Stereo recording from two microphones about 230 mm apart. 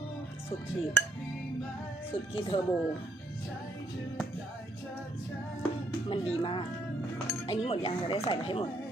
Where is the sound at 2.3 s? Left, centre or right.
Left.